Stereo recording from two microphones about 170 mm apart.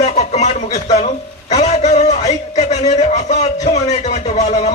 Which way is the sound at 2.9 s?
40° left (ahead or behind).